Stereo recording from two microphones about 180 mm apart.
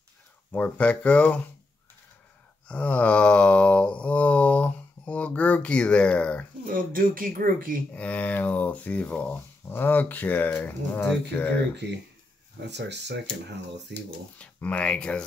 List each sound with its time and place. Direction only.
0.5 s mantra: 10° left (ahead or behind)
2.7 s mantra: 10° left (ahead or behind)
6.6 s speech: 50° right (ahead or behind)
7.9 s mantra: 10° left (ahead or behind)
12.5 s speech: 75° right (ahead or behind)
13.9 s mantra: 10° left (ahead or behind)